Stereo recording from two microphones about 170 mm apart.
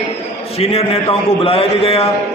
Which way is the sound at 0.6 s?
35° left (ahead or behind).